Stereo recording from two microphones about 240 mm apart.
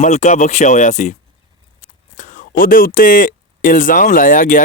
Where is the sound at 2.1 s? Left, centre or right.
Left.